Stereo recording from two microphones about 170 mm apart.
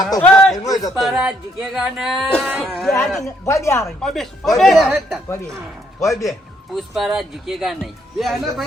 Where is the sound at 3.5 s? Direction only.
15° left (ahead or behind).